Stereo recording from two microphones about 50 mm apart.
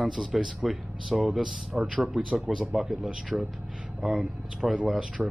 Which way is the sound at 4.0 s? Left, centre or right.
Centre.